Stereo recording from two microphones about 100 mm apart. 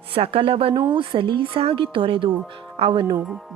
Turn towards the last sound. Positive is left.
turn(degrees=-65)  # may be behind; listen again after turning